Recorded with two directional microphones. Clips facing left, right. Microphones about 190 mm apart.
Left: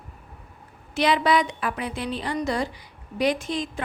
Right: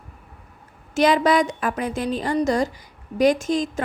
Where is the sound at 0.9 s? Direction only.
45° right (ahead or behind).